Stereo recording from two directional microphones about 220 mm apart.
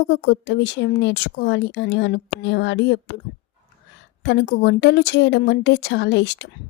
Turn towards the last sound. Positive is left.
turn(degrees=50)  # may be behind; listen again after turning